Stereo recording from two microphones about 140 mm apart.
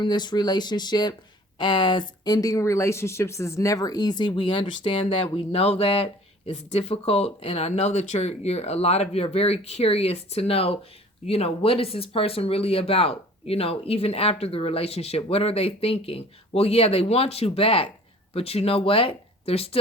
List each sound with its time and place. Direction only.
0.0 s speech: 30° left (ahead or behind)